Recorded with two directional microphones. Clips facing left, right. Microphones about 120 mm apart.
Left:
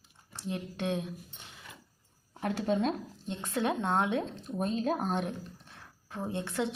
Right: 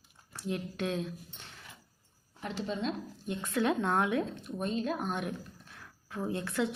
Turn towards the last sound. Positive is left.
turn(degrees=25)  # may be behind; listen again after turning